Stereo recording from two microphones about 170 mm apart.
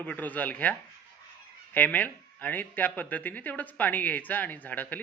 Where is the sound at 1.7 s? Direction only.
10° left (ahead or behind).